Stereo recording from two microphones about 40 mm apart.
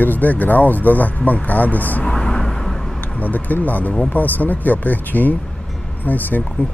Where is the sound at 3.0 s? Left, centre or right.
Left.